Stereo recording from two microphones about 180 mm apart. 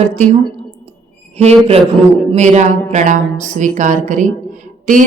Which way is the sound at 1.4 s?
35° right (ahead or behind).